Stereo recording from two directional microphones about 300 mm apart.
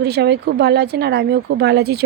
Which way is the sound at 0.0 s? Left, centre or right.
Right.